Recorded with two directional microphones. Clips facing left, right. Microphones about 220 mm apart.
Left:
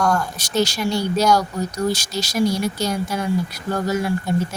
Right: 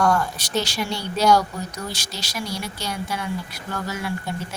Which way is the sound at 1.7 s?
40° left (ahead or behind).